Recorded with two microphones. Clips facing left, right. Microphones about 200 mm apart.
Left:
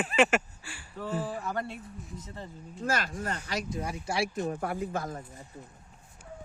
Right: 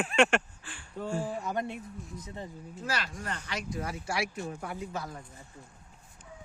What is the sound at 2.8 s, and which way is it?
Speech, 45° left (ahead or behind).